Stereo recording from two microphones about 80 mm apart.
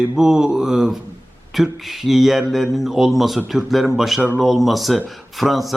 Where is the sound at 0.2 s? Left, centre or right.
Centre.